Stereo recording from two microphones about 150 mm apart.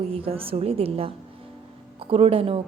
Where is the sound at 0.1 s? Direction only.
40° right (ahead or behind).